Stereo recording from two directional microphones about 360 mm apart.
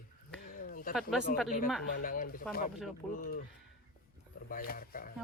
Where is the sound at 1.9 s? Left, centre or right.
Left.